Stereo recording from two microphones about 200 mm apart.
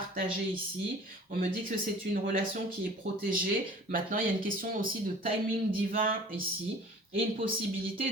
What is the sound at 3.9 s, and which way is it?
Speech, 45° right (ahead or behind).